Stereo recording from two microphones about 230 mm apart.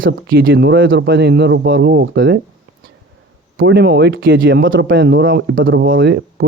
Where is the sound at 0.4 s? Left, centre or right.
Right.